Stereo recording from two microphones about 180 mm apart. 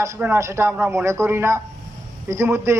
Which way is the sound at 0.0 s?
15° right (ahead or behind).